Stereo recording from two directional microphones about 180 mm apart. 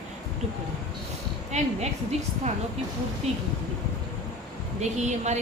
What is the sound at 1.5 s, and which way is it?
Speech, 40° right (ahead or behind).